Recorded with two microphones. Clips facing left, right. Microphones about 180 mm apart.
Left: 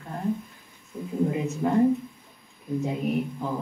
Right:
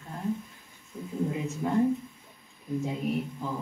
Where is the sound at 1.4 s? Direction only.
70° left (ahead or behind).